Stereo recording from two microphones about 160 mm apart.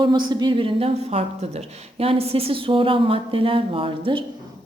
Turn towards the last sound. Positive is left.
turn(degrees=-35)  # may be behind; listen again after turning